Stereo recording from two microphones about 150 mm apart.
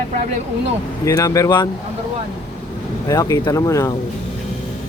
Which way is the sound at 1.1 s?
20° left (ahead or behind).